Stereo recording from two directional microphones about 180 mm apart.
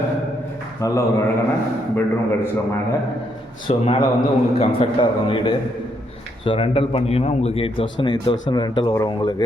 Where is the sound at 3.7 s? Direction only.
30° left (ahead or behind).